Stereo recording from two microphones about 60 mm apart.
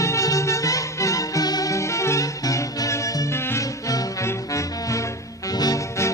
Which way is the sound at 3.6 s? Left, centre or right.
Left.